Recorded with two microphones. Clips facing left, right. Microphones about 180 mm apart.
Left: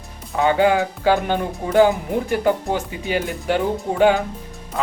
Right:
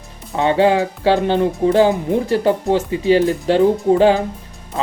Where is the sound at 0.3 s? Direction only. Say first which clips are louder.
Right 2 dB; 30° right (ahead or behind).